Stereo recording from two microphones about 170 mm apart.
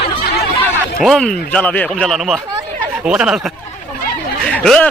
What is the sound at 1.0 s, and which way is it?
A man's voice, 5° left (ahead or behind).